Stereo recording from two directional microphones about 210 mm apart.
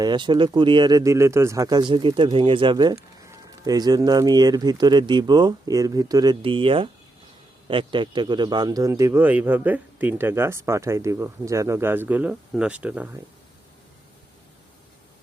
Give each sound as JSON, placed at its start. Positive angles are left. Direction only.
{"t": 0.0, "sound": "a man's voice", "side_deg": -20}